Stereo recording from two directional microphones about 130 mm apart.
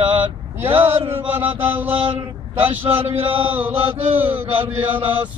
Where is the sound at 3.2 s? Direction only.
15° right (ahead or behind).